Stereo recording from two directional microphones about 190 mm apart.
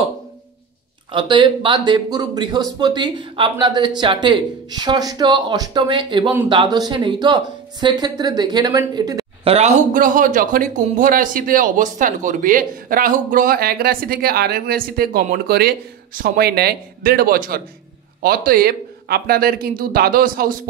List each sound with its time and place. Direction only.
1.1 s speech: 25° right (ahead or behind)
9.4 s speech: 35° right (ahead or behind); by 20.5 s 50° right (ahead or behind)